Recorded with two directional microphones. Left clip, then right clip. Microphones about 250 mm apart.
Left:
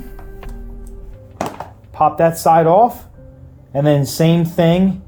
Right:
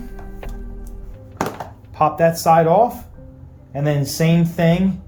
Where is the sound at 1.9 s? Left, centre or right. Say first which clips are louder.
Left 2 dB; left.